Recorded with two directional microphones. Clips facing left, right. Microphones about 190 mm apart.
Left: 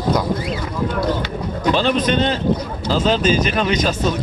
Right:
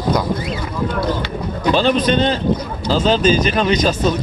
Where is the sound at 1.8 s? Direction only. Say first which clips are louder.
Right 3 dB; 35° right (ahead or behind).